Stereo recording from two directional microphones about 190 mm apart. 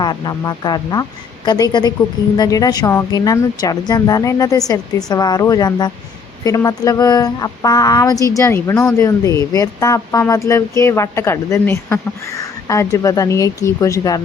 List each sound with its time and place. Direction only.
0.0 s speech: 20° left (ahead or behind)
2.3 s a woman's voice: 20° left (ahead or behind)